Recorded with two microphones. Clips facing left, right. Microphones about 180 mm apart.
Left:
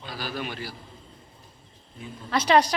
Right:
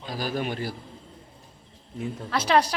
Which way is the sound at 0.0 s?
45° right (ahead or behind).